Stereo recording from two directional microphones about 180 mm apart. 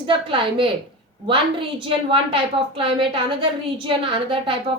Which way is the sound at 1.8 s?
30° right (ahead or behind).